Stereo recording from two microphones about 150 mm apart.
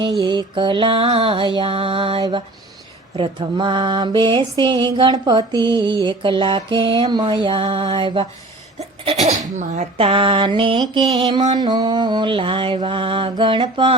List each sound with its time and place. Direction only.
0.0 s mantra: 30° right (ahead or behind)
8.8 s mantra: 45° right (ahead or behind)